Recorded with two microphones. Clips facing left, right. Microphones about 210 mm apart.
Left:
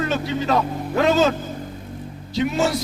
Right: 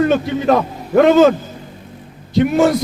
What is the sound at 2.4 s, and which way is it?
Speech, 55° right (ahead or behind).